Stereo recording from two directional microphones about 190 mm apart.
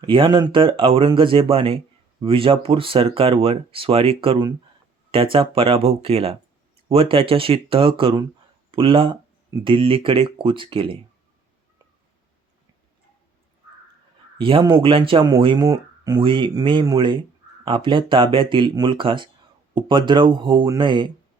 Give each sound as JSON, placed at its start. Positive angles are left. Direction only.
{"t": 0.0, "sound": "speech", "side_deg": -25}
{"t": 14.3, "sound": "speech", "side_deg": -25}